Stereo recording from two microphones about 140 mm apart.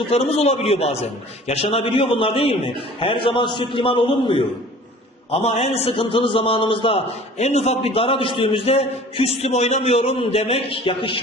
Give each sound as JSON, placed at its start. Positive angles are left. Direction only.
{"t": 0.0, "sound": "a man's voice", "side_deg": 45}